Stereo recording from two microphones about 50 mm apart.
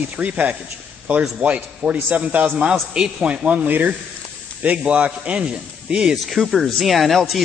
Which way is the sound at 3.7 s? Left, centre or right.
Right.